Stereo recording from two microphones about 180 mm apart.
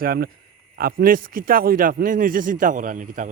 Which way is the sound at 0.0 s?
55° right (ahead or behind).